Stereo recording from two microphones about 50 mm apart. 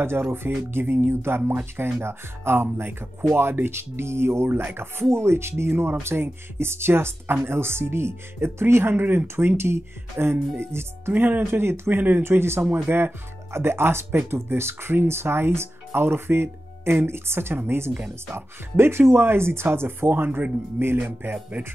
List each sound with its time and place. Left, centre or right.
0.0 s speech: right
11.1 s speech: right
11.6 s speech: right